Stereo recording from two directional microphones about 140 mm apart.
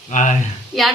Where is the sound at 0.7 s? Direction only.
Centre (ahead or behind).